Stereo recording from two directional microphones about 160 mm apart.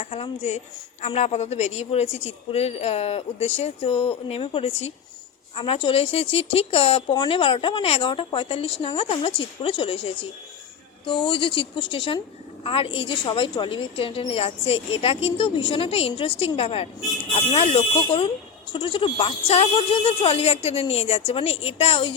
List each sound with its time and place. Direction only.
0.0 s speech: 40° left (ahead or behind)